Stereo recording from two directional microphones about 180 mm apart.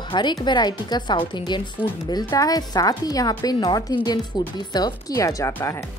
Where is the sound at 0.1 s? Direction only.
25° left (ahead or behind).